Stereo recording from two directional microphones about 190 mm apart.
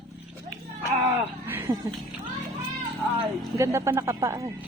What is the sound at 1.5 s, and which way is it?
Music, 10° right (ahead or behind).